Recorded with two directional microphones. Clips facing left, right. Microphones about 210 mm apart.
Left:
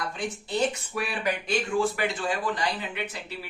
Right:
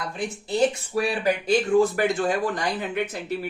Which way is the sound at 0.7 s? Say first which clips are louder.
Right 7 dB; 35° right (ahead or behind).